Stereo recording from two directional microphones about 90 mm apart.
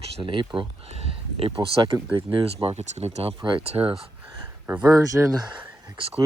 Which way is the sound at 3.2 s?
80° right.